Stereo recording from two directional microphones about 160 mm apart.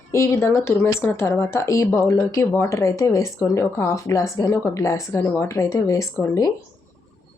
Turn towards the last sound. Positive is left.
turn(degrees=20)  # may be behind; listen again after turning